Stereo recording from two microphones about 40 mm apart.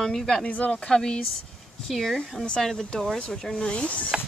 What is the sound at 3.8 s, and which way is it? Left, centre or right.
Speech, left.